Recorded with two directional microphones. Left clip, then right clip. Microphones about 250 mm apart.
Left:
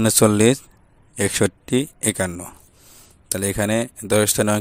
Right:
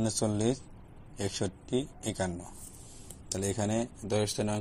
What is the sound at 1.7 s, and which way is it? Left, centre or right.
Speech, left.